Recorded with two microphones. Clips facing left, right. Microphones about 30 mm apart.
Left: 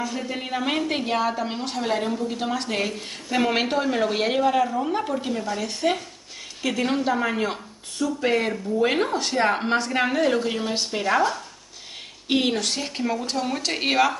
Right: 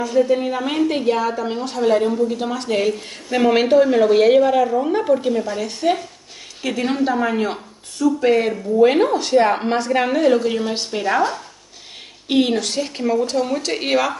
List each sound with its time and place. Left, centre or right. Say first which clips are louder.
0.0 s a woman's voice: right 12 dB; centre
12.3 s a woman's voice: right 5 dB; centre